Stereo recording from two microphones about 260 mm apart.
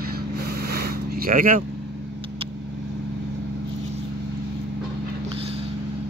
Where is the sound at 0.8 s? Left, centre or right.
Right.